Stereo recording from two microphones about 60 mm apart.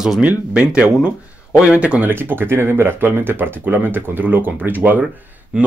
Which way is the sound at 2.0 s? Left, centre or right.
Right.